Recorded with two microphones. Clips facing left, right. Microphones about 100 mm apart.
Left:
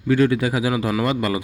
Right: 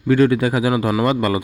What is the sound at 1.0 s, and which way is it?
Speech, 45° right (ahead or behind).